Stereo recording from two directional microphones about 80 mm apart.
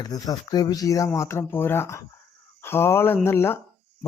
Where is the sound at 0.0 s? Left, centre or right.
Left.